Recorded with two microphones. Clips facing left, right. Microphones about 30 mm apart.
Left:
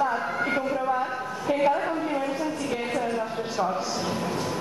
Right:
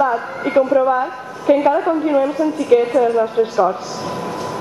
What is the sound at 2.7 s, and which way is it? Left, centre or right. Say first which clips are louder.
Speech: right 17 dB; right.